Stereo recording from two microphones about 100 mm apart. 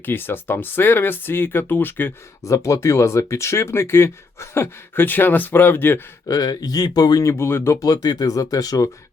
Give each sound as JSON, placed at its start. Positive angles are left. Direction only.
{"t": 0.0, "sound": "speech", "side_deg": 20}
{"t": 2.4, "sound": "speech", "side_deg": 30}
{"t": 6.2, "sound": "speech", "side_deg": 40}